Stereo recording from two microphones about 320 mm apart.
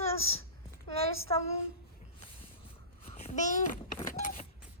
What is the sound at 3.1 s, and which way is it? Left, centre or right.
Babbling, left.